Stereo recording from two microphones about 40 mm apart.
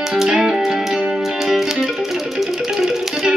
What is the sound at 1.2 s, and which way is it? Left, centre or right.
Music, centre.